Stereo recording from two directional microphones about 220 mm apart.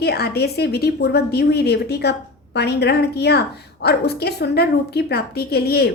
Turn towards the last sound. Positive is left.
turn(degrees=45)  # may be behind; listen again after turning